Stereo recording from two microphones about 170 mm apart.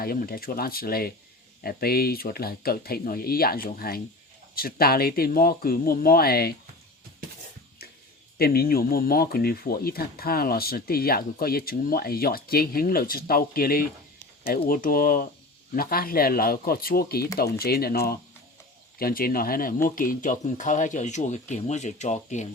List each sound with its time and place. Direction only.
0.0 s speech: 60° left (ahead or behind)
8.4 s speech: 65° left (ahead or behind); by 22.4 s 45° left (ahead or behind)